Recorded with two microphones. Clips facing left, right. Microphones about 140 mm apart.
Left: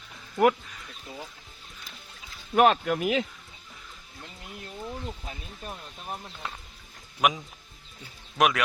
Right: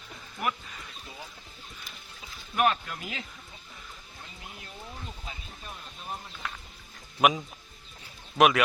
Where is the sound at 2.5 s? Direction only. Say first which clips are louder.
Left 6 dB; 75° left (ahead or behind).